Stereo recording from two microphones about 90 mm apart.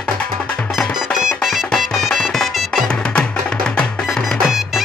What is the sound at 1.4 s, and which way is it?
Music, centre (ahead or behind).